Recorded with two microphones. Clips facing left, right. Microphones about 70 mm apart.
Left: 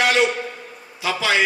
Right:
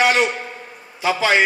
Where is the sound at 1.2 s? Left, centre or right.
Right.